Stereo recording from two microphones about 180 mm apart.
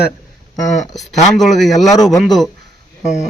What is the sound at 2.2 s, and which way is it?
Speech, centre (ahead or behind).